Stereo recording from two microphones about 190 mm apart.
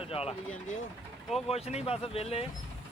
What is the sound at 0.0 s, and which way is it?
Speech, 30° left (ahead or behind).